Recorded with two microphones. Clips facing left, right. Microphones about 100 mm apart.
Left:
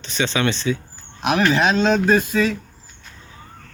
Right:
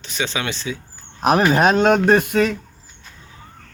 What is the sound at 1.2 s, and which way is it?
A man's voice, 40° right (ahead or behind).